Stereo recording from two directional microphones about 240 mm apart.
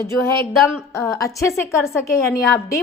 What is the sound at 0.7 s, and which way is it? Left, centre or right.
A woman's voice, centre.